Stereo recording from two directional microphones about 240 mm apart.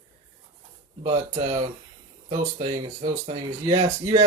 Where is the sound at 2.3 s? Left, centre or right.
Right.